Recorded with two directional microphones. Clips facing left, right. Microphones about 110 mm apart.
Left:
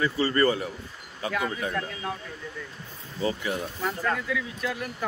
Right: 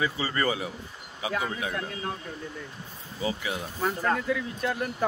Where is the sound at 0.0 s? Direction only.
10° right (ahead or behind).